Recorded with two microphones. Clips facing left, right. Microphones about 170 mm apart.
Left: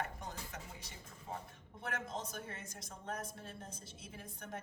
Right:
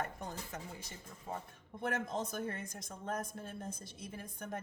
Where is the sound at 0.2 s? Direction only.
45° right (ahead or behind).